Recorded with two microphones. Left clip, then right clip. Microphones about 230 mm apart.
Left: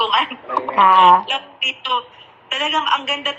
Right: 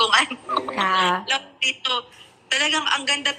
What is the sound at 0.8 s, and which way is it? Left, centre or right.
Speech, right.